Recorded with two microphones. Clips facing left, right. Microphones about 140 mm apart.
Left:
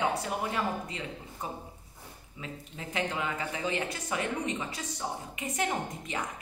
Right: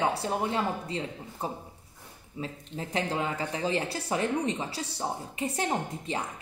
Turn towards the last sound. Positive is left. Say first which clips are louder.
# right 3 dB
turn(degrees=-30)  # may be behind; listen again after turning